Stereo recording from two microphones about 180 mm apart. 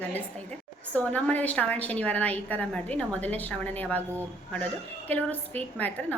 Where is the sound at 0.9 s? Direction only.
10° left (ahead or behind).